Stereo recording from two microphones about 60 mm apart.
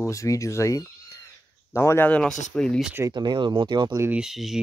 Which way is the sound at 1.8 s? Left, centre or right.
Left.